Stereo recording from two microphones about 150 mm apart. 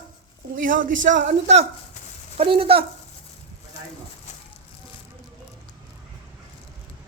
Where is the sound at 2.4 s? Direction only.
40° right (ahead or behind).